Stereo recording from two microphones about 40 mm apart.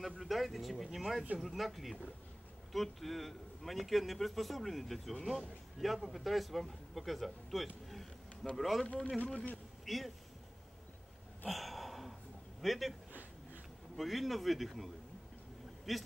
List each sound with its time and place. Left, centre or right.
0.2 s a man's voice: centre
8.8 s a man's voice: left
9.8 s speech: centre
11.4 s a sound: centre
12.6 s a man's voice: centre
13.1 s a sound: right
13.9 s a man's voice: centre
15.9 s a man's voice: centre